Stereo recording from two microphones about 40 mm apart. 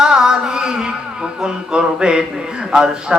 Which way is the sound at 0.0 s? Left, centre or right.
Centre.